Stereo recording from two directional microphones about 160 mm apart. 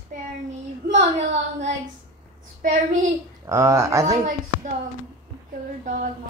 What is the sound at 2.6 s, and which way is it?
Speech, 50° right (ahead or behind).